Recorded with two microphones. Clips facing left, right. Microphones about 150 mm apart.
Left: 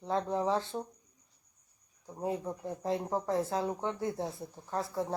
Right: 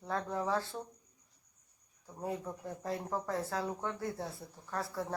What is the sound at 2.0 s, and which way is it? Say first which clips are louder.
Speech: left 4 dB; 20° left (ahead or behind).